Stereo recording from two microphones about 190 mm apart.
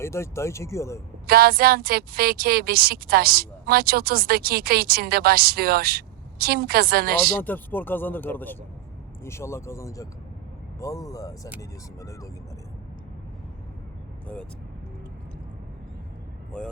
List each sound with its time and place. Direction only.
0.0 s speech: 15° left (ahead or behind)
1.3 s a woman's voice: 55° right (ahead or behind)
7.4 s speech: 10° left (ahead or behind)